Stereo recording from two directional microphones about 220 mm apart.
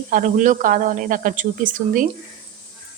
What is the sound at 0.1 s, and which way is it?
A woman's voice, 35° right (ahead or behind).